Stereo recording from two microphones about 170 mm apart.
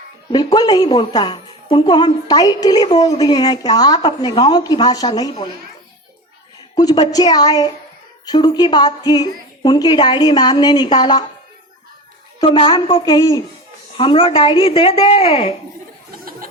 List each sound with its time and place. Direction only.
0.3 s a woman's voice: 25° left (ahead or behind)
6.7 s a woman's voice: 25° left (ahead or behind)
12.4 s a woman's voice: 30° left (ahead or behind)
13.1 s a woman's voice: 20° left (ahead or behind)
13.9 s speech: 30° left (ahead or behind)
16.1 s a sound: 60° right (ahead or behind)